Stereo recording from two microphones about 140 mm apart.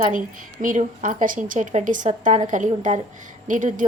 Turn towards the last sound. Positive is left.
turn(degrees=-65)  # may be behind; listen again after turning